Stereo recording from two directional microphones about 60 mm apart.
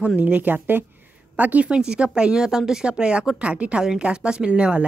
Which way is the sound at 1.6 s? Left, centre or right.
Centre.